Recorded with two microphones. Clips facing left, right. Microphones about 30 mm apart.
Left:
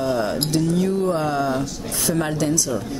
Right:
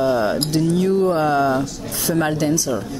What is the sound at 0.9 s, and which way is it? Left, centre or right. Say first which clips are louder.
Speech: right 4 dB; right.